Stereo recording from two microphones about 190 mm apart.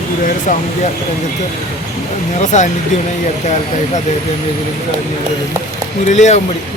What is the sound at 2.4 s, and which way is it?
Speech, 40° left (ahead or behind).